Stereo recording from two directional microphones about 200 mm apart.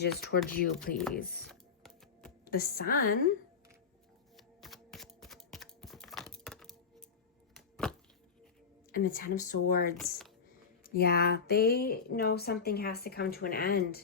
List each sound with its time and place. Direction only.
0.0 s speech: 55° left (ahead or behind)
1.5 s typing: centre (ahead or behind)
2.4 s a woman's voice: 50° left (ahead or behind)
4.4 s typing: centre (ahead or behind)
7.5 s chopping: 5° left (ahead or behind)
8.9 s speech: 45° left (ahead or behind)